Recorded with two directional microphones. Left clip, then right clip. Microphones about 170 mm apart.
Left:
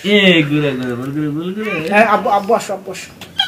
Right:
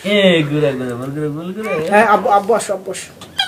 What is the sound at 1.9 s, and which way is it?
Speech, 40° right (ahead or behind).